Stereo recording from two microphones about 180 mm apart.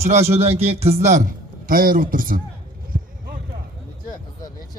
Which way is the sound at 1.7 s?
50° right (ahead or behind).